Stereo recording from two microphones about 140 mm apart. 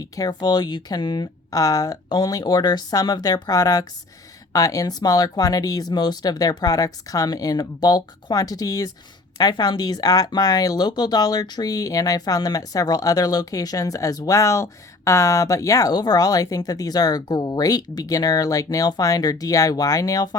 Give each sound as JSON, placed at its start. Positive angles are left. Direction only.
{"t": 0.0, "sound": "speech", "side_deg": 30}